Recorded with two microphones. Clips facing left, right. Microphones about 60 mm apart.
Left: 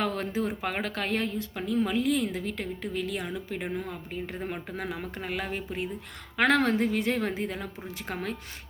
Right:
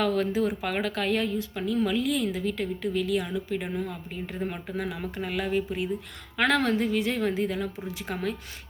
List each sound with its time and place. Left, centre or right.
0.0 s a woman's voice: left